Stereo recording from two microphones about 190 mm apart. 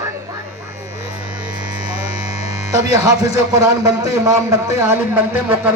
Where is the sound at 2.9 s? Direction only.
20° right (ahead or behind).